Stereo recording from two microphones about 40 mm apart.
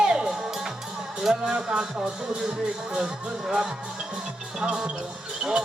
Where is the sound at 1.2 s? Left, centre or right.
Centre.